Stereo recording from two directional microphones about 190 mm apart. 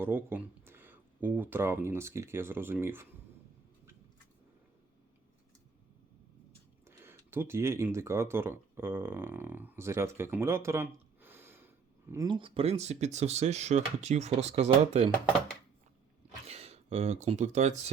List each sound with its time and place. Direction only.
0.0 s speech: 10° right (ahead or behind)
6.8 s speech: 15° right (ahead or behind)
12.1 s speech: 20° right (ahead or behind)
16.5 s speech: 35° right (ahead or behind)